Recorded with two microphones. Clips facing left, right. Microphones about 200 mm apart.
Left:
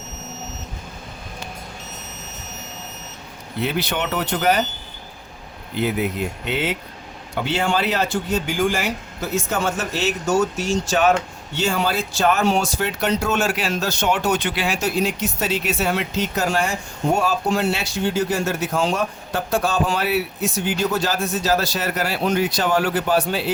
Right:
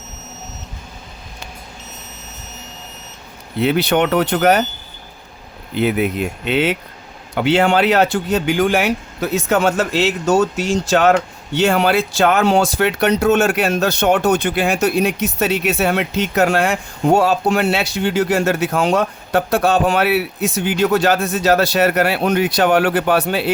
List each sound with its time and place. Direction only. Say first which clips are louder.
3.6 s speech: right 8 dB; 65° right (ahead or behind)
6.5 s speech: right 9 dB; 70° right (ahead or behind)
11.5 s speech: right 7 dB; 65° right (ahead or behind)